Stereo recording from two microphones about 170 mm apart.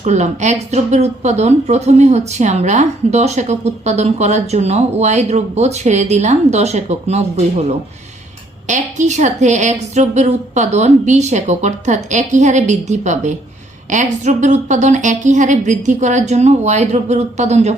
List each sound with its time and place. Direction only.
0.0 s a woman's voice: 45° right (ahead or behind)